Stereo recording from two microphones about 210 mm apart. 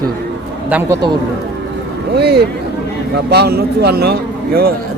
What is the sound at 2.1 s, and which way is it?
Speech, 50° right (ahead or behind).